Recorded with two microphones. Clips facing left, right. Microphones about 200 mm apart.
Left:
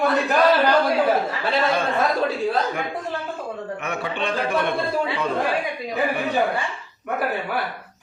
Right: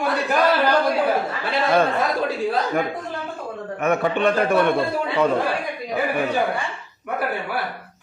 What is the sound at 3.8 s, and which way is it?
Speech, 50° right (ahead or behind).